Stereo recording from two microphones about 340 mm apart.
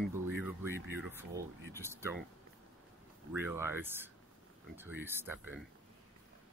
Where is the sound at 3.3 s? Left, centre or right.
Centre.